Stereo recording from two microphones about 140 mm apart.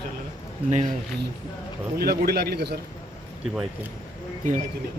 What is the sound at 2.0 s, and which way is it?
Speech, 90° right.